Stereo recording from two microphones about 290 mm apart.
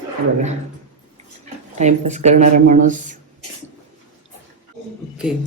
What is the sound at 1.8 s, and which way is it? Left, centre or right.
Speech, right.